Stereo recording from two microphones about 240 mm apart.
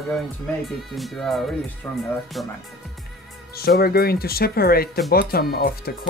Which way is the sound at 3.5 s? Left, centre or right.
Left.